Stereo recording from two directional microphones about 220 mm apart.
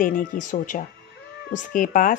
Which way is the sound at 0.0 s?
35° left (ahead or behind).